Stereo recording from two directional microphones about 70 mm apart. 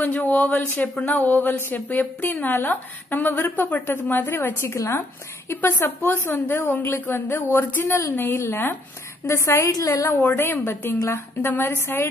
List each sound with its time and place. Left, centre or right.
0.0 s a woman's voice: left
9.2 s a woman's voice: left
10.2 s a woman's voice: left